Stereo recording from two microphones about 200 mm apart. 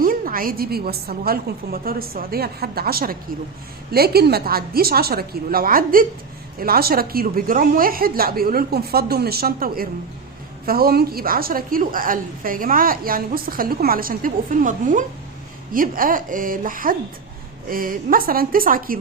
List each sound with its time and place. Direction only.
0.0 s a woman's voice: 45° right (ahead or behind)